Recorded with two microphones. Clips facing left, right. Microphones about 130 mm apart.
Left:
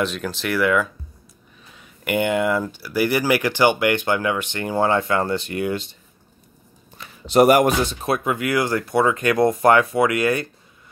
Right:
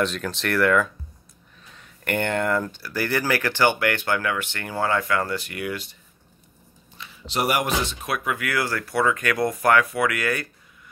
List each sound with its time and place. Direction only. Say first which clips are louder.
0.0 s speech: left 1 dB; centre (ahead or behind); by 5.9 s 25° left (ahead or behind)
7.0 s speech: left 11 dB; 45° left (ahead or behind); by 10.5 s 25° left (ahead or behind)